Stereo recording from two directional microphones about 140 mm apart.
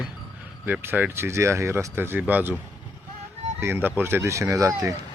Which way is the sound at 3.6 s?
15° right (ahead or behind).